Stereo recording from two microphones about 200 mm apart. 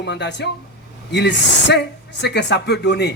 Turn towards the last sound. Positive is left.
turn(degrees=55)  # may be behind; listen again after turning